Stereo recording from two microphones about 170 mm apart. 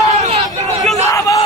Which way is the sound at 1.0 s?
20° left (ahead or behind).